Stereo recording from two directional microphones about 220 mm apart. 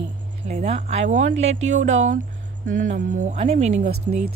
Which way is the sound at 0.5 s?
30° right (ahead or behind).